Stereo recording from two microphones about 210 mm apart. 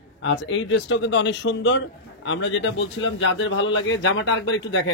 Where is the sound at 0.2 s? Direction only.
60° left (ahead or behind).